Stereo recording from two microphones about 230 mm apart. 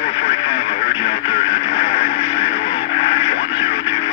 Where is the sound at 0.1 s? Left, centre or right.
Left.